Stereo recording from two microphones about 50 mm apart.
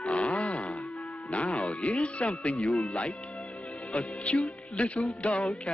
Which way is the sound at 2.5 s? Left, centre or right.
Centre.